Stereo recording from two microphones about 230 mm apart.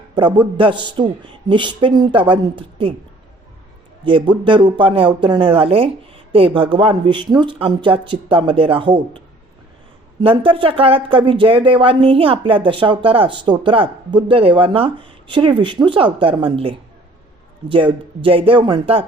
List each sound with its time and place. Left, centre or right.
0.2 s speech: right
4.0 s speech: right
10.2 s speech: right